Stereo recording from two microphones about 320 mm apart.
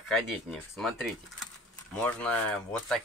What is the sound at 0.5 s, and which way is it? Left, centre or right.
Speech, centre.